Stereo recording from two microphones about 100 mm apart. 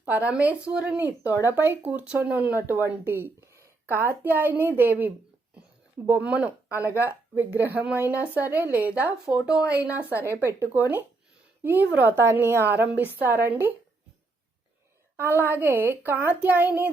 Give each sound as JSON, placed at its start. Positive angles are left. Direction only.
{"t": 0.0, "sound": "speech", "side_deg": -15}
{"t": 15.2, "sound": "speech", "side_deg": -25}